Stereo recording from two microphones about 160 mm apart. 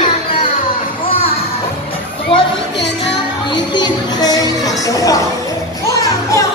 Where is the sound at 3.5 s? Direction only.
25° left (ahead or behind).